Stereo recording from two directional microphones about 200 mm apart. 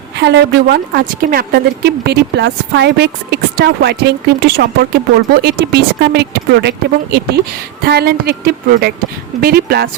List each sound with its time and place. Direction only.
0.2 s a woman's voice: 60° right (ahead or behind)